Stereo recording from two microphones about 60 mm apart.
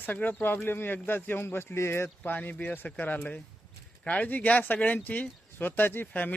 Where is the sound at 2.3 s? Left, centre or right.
Left.